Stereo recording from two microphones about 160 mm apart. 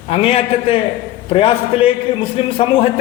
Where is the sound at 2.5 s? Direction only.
35° left (ahead or behind).